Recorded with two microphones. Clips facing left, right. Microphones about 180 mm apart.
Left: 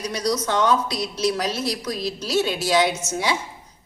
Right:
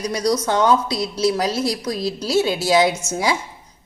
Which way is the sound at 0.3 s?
35° right (ahead or behind).